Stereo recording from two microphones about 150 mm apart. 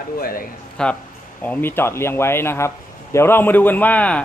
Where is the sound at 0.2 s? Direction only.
75° left (ahead or behind).